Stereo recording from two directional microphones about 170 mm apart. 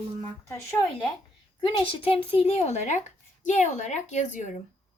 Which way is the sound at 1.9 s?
30° left (ahead or behind).